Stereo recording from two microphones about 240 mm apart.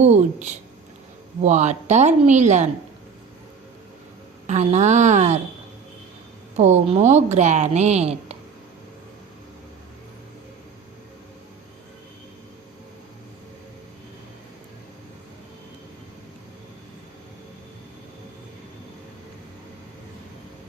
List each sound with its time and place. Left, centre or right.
0.0 s a woman's voice: right
4.4 s a woman's voice: right
6.6 s a woman's voice: right